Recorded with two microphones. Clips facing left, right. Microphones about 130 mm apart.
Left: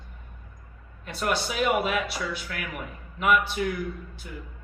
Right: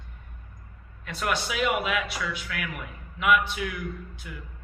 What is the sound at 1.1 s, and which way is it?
A man's voice, 35° left (ahead or behind).